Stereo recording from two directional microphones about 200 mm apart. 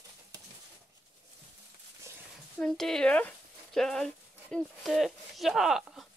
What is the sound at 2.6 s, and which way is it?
Speech, centre (ahead or behind).